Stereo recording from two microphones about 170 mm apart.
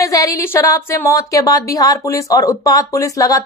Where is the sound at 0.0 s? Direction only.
20° left (ahead or behind).